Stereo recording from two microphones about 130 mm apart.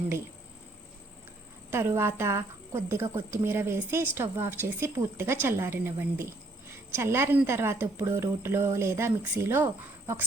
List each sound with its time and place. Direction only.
1.7 s a woman's voice: 20° right (ahead or behind)